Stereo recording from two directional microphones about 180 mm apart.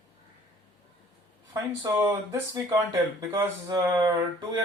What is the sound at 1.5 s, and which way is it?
Speech, 20° right (ahead or behind).